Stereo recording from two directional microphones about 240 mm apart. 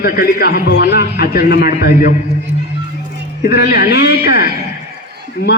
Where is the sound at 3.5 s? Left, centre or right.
Left.